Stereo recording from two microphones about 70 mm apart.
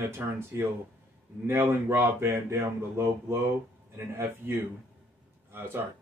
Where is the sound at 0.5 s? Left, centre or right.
Right.